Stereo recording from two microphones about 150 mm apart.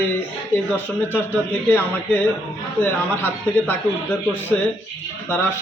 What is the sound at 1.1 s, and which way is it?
A man's voice, 15° left (ahead or behind).